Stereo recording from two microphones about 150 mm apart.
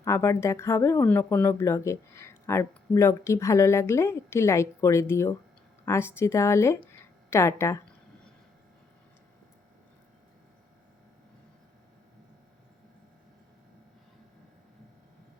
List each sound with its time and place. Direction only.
0.0 s speech: 20° left (ahead or behind)